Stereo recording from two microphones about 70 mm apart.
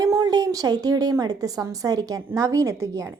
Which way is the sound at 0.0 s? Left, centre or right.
Right.